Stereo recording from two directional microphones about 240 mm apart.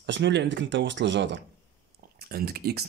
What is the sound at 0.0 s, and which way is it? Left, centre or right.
Speech, right.